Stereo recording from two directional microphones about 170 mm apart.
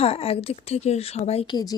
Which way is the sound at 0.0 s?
35° left (ahead or behind).